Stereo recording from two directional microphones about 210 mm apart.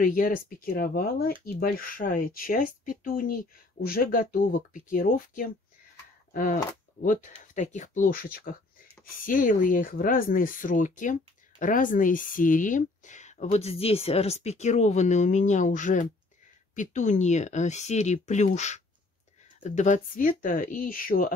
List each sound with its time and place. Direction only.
0.0 s speech: 40° left (ahead or behind)